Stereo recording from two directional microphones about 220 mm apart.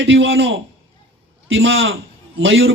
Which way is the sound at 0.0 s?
60° right (ahead or behind).